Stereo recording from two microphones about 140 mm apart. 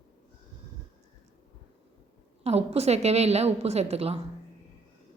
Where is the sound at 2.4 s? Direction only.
50° right (ahead or behind).